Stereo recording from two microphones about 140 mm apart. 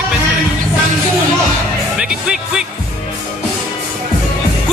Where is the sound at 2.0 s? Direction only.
5° right (ahead or behind).